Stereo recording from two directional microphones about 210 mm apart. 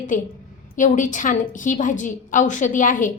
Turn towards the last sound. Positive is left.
turn(degrees=40)  # may be behind; listen again after turning